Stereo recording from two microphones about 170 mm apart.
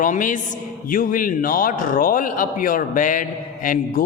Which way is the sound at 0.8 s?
55° left (ahead or behind).